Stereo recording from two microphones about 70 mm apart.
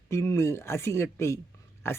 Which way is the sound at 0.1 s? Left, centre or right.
Left.